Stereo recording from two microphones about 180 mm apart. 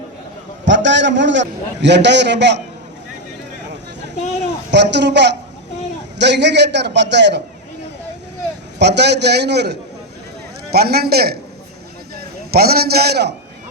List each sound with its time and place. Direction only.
0.6 s a man's voice: 90° right
4.7 s a man's voice: 70° right (ahead or behind)
8.8 s a man's voice: 70° right (ahead or behind)